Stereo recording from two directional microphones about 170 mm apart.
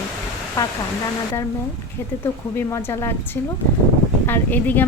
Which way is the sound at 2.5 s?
15° left (ahead or behind).